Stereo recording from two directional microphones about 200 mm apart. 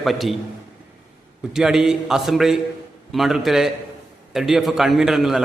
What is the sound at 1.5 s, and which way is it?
A man's voice, centre (ahead or behind).